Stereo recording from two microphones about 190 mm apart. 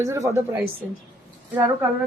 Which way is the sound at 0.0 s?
15° right (ahead or behind).